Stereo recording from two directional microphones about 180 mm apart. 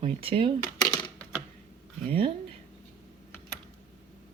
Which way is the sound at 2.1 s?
30° right (ahead or behind).